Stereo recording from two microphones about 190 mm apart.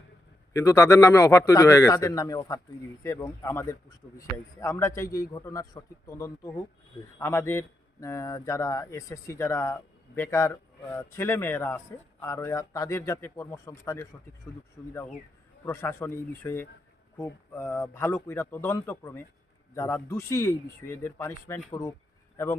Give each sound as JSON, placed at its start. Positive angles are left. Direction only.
{"t": 0.5, "sound": "speech", "side_deg": 15}
{"t": 15.6, "sound": "speech", "side_deg": 15}